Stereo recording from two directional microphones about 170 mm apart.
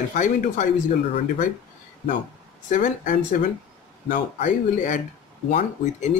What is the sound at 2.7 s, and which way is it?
Speech, 55° left (ahead or behind).